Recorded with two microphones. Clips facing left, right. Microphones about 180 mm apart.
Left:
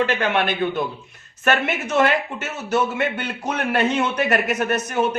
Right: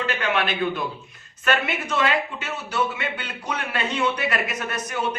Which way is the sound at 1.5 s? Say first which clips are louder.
Left 3 dB; 50° left (ahead or behind).